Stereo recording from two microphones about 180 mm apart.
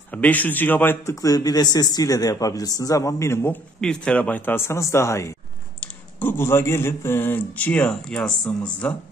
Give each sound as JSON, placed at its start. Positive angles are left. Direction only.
{"t": 0.1, "sound": "a man's voice", "side_deg": 10}
{"t": 3.8, "sound": "speech", "side_deg": 5}